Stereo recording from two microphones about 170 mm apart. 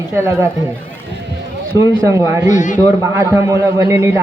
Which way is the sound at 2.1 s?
20° right (ahead or behind).